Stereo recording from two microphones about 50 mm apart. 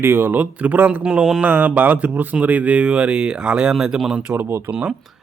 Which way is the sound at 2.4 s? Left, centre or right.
Right.